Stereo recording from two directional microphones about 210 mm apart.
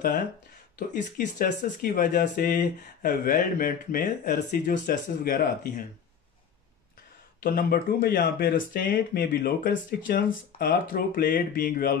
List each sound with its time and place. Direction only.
0.7 s speech: 40° left (ahead or behind)
7.4 s speech: 45° left (ahead or behind)